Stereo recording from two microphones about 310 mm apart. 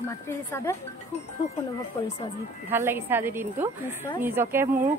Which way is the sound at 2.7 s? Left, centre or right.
Centre.